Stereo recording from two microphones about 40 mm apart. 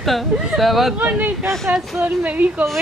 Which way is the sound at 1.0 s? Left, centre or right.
Right.